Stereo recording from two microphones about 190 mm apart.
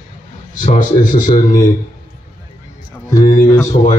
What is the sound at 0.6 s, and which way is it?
Speech, 45° left (ahead or behind).